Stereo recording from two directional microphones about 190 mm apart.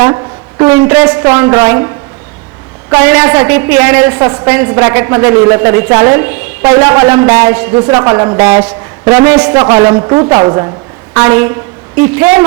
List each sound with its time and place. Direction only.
0.6 s a woman's voice: 15° right (ahead or behind)
2.9 s a woman's voice: 10° right (ahead or behind)